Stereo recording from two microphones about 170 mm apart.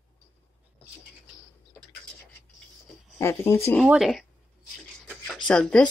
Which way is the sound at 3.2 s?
15° left (ahead or behind).